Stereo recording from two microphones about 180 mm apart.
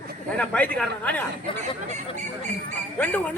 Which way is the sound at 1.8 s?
40° right (ahead or behind).